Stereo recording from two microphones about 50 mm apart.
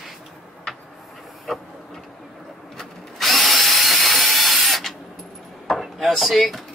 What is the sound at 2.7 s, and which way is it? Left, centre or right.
Drill, centre.